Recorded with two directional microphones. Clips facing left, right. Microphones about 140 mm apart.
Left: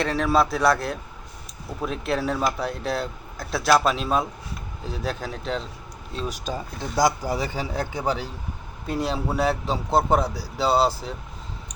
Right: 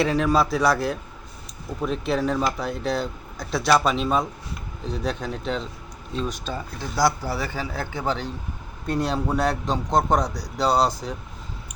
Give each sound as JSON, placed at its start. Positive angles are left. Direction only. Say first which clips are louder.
{"t": 0.0, "sound": "speech", "louder": "right 1 dB", "side_deg": 0}
{"t": 6.1, "sound": "speech", "louder": "right 1 dB", "side_deg": 10}